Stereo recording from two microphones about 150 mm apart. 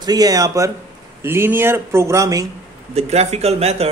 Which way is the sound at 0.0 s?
25° right (ahead or behind).